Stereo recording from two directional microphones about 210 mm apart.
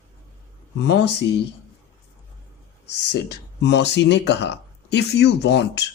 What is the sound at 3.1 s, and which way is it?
Speech, 55° left (ahead or behind).